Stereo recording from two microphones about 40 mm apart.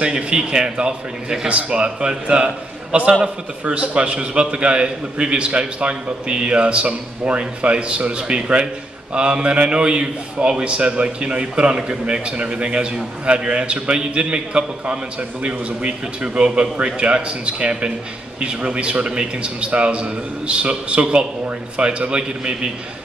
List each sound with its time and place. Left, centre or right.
0.0 s a man's voice: right